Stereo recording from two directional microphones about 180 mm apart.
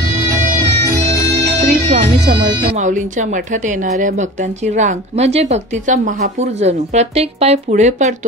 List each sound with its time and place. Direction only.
1.0 s music: 35° right (ahead or behind)
2.8 s speech: 45° right (ahead or behind)